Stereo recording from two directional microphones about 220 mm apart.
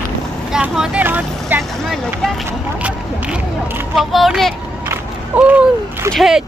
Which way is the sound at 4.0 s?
Centre (ahead or behind).